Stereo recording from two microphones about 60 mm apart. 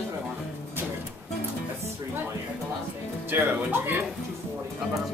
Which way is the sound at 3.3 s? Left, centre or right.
Right.